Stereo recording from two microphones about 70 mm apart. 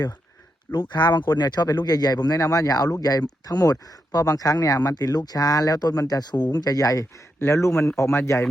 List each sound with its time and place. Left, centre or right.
0.9 s speech: left
7.3 s speech: left